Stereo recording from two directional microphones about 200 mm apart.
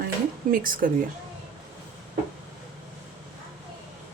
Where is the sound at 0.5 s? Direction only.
45° right (ahead or behind).